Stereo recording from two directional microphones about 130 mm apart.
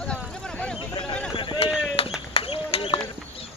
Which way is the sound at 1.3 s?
40° left (ahead or behind).